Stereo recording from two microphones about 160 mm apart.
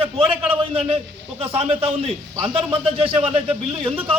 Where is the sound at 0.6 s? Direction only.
35° right (ahead or behind).